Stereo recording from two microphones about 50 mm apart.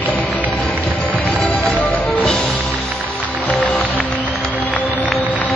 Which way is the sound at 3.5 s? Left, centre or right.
Left.